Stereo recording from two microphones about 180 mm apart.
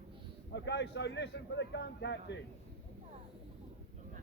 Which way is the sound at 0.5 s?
75° left (ahead or behind).